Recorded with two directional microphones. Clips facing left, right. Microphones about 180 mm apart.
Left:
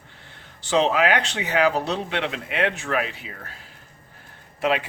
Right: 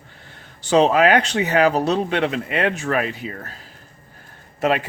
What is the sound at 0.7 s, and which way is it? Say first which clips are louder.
Speech: right 5 dB; 45° right (ahead or behind).